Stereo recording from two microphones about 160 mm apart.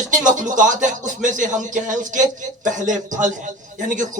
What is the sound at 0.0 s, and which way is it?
Speech, 50° right (ahead or behind).